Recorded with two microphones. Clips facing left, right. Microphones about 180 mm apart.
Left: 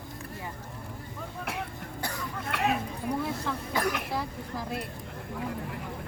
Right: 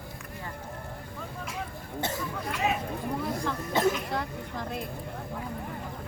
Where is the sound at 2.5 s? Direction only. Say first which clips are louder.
Left 1 dB; 65° left (ahead or behind).